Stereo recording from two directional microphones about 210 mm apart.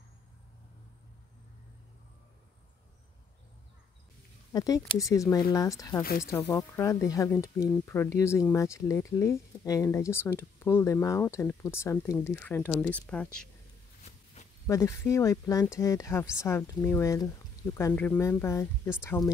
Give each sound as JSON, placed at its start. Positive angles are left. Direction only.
{"t": 4.5, "sound": "speech", "side_deg": 15}
{"t": 6.0, "sound": "speech", "side_deg": 45}
{"t": 6.3, "sound": "speech", "side_deg": 10}
{"t": 14.7, "sound": "speech", "side_deg": 15}